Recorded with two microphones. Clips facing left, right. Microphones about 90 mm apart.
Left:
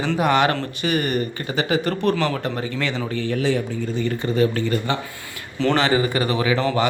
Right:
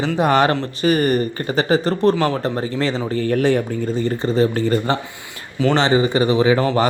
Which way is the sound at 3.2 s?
50° right (ahead or behind).